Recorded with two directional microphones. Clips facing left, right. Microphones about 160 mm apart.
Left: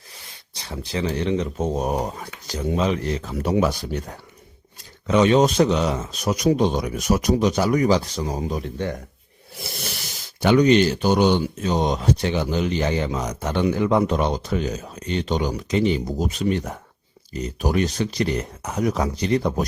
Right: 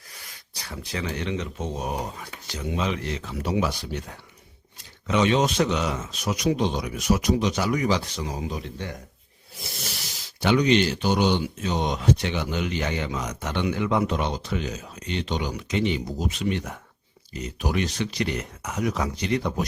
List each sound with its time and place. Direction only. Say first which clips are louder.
0.1 s speech: left 1 dB; 25° left (ahead or behind); by 9.0 s 50° left (ahead or behind)
10.4 s speech: left 5 dB; 45° left (ahead or behind)